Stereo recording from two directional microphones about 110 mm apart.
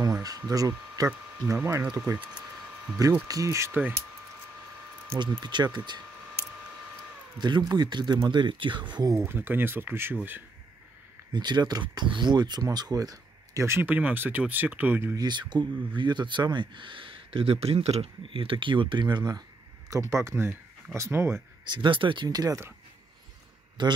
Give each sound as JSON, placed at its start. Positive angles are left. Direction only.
{"t": 0.0, "sound": "speech", "side_deg": -35}
{"t": 1.5, "sound": "speech", "side_deg": -20}
{"t": 3.3, "sound": "speech", "side_deg": -30}
{"t": 5.4, "sound": "speech", "side_deg": -40}
{"t": 7.3, "sound": "speech", "side_deg": -40}
{"t": 9.1, "sound": "speech", "side_deg": -20}
{"t": 11.3, "sound": "speech", "side_deg": -40}
{"t": 15.1, "sound": "speech", "side_deg": -40}
{"t": 19.9, "sound": "speech", "side_deg": -25}
{"t": 21.6, "sound": "speech", "side_deg": -45}
{"t": 23.8, "sound": "speech", "side_deg": -45}